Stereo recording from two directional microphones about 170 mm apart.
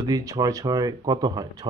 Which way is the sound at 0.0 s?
20° right (ahead or behind).